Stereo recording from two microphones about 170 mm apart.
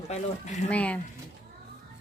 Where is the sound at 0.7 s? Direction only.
10° left (ahead or behind).